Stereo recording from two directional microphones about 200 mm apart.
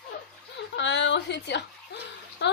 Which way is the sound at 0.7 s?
60° left (ahead or behind).